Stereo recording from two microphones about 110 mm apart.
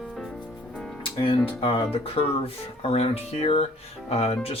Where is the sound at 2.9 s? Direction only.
70° left (ahead or behind).